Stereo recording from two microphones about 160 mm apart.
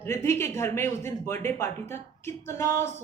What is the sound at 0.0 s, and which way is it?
Speech, 15° left (ahead or behind).